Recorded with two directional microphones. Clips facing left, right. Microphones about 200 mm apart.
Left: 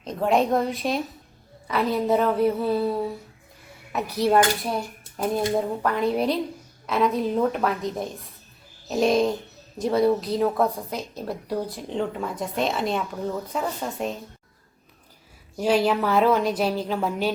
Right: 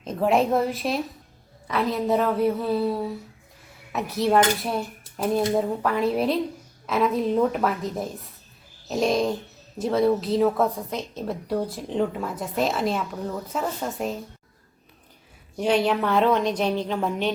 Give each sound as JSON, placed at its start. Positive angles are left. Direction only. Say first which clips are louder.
{"t": 0.0, "sound": "a woman's voice", "louder": "right 1 dB", "side_deg": -5}
{"t": 15.5, "sound": "a woman's voice", "louder": "left 1 dB", "side_deg": 0}